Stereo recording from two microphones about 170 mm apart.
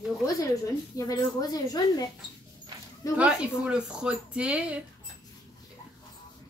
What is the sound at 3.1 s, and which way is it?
Speech, 5° right (ahead or behind).